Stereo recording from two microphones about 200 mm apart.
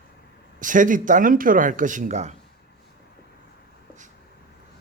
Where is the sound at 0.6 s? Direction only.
40° right (ahead or behind).